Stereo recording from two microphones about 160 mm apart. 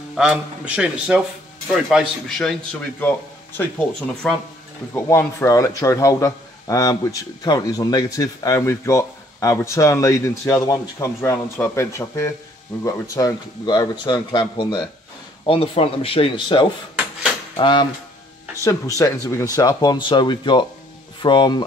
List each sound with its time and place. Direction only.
0.1 s a man's voice: 5° right (ahead or behind)
4.2 s speech: 5° left (ahead or behind)
4.9 s speech: 15° left (ahead or behind)
18.6 s speech: 20° left (ahead or behind)